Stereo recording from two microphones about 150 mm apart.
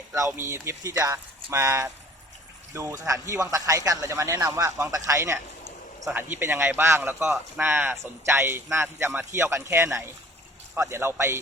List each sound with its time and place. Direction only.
0.1 s a man's voice: 15° right (ahead or behind)